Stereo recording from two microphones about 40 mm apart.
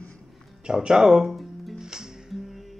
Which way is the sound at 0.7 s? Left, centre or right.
Centre.